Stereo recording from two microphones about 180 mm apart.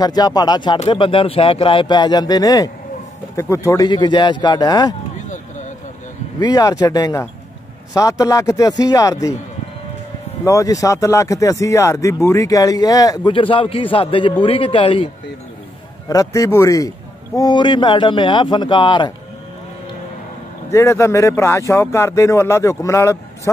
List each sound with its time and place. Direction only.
0.0 s speech: 20° left (ahead or behind)
6.4 s speech: 20° left (ahead or behind)
10.4 s speech: 20° left (ahead or behind)
16.1 s speech: 20° left (ahead or behind)
20.7 s speech: 15° left (ahead or behind)